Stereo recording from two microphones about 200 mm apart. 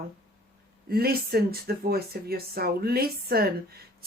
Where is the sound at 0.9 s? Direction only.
50° right (ahead or behind).